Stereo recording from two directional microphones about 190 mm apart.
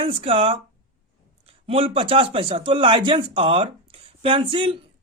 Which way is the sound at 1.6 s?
30° right (ahead or behind).